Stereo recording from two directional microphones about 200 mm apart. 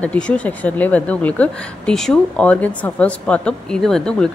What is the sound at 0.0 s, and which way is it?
A woman's voice, 5° left (ahead or behind).